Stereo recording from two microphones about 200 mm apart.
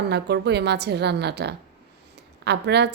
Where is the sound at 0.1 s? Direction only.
55° right (ahead or behind).